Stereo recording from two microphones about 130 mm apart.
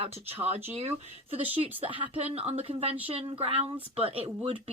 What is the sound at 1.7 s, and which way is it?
Speech, 45° right (ahead or behind).